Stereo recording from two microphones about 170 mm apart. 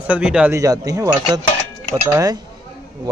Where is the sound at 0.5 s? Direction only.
20° right (ahead or behind).